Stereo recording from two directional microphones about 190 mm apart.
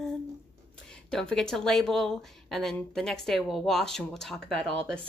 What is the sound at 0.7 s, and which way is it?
Speech, 5° left (ahead or behind).